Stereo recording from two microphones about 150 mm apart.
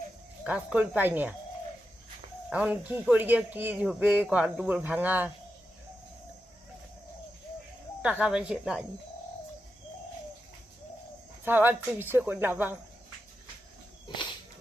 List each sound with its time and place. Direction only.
0.4 s speech: 10° right (ahead or behind)
2.5 s speech: 10° right (ahead or behind)
8.0 s speech: 10° right (ahead or behind)
11.4 s speech: 15° right (ahead or behind)